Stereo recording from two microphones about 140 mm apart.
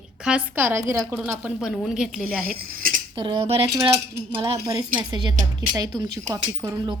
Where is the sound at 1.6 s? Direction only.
5° right (ahead or behind).